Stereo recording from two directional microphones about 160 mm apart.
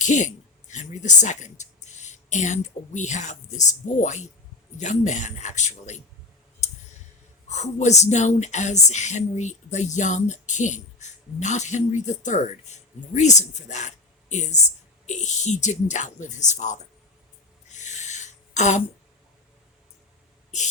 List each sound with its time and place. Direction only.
0.0 s speech: 50° left (ahead or behind)
6.6 s clicking: 45° left (ahead or behind)
7.4 s speech: 45° left (ahead or behind)
17.7 s a sound: 45° left (ahead or behind)